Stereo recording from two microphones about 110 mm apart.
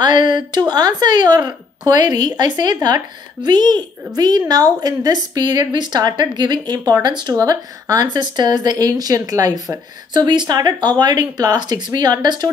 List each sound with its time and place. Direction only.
0.0 s a woman's voice: 40° right (ahead or behind)